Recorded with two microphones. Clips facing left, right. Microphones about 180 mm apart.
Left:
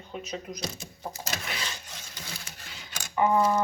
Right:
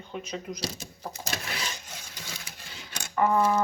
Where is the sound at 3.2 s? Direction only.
Centre (ahead or behind).